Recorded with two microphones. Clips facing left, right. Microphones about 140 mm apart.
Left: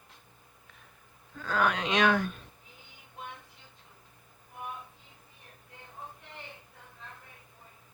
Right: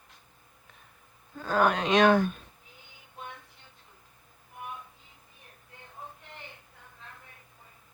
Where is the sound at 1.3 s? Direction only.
40° right (ahead or behind).